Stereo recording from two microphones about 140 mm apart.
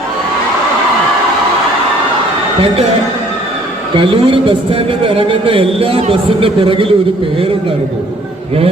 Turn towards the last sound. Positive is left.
turn(degrees=-40)  # may be behind; listen again after turning